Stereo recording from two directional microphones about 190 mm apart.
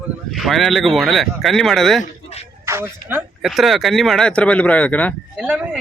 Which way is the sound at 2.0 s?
35° left (ahead or behind).